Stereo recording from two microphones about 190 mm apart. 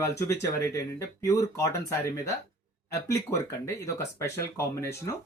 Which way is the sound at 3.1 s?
15° left (ahead or behind).